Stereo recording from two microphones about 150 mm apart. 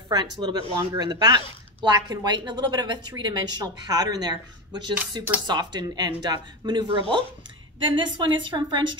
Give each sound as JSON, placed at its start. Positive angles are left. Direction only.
{"t": 0.1, "sound": "a woman's voice", "side_deg": -30}